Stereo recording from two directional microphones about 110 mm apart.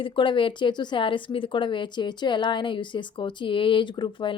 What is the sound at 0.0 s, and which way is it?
A woman's voice, 50° left (ahead or behind).